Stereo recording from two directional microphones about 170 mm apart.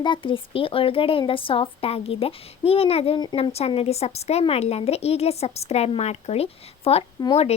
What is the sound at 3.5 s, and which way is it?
A woman's voice, 35° left (ahead or behind).